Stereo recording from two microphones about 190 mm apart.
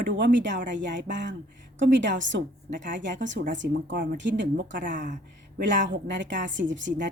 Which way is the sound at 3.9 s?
45° right (ahead or behind).